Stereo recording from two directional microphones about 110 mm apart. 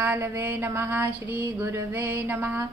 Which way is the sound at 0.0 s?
20° right (ahead or behind).